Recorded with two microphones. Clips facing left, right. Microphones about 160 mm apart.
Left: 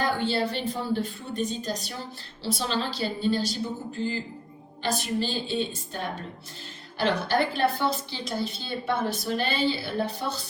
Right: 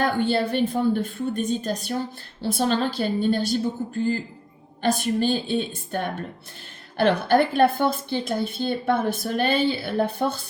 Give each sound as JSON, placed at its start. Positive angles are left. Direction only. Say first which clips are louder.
{"t": 0.0, "sound": "a woman's voice", "louder": "right 4 dB", "side_deg": -55}
{"t": 4.8, "sound": "a woman's voice", "louder": "right 6 dB", "side_deg": -50}